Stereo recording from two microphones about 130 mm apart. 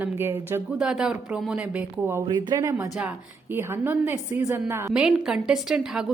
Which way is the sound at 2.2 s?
35° right (ahead or behind).